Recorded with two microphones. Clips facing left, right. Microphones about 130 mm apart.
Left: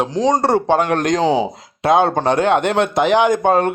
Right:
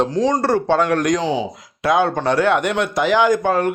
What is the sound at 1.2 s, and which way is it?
Speech, 40° left (ahead or behind).